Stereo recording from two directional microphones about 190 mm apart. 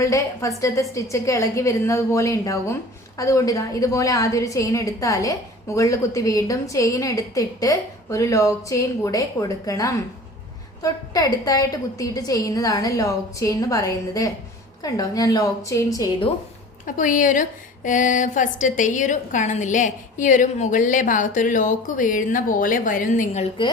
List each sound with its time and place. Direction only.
0.0 s a woman's voice: 15° left (ahead or behind)
11.1 s a woman's voice: 20° left (ahead or behind)
16.8 s a woman's voice: 45° left (ahead or behind)